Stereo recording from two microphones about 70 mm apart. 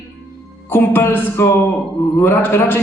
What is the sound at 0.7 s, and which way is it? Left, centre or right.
A man's voice, left.